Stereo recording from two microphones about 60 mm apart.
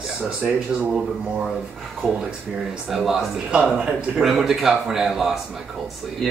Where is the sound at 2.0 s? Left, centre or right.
Centre.